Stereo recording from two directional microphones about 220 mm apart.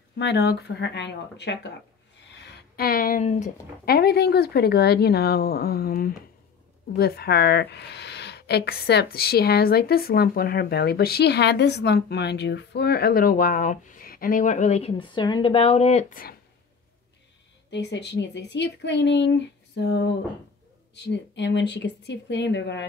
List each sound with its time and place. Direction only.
0.2 s a woman's voice: 50° left (ahead or behind)
17.6 s a woman's voice: 50° left (ahead or behind)